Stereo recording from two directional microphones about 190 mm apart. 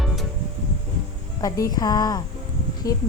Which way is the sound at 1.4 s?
15° left (ahead or behind).